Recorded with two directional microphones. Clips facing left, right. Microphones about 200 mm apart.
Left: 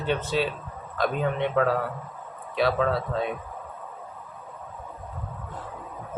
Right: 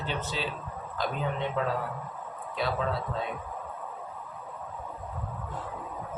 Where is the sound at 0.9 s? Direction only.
65° left (ahead or behind).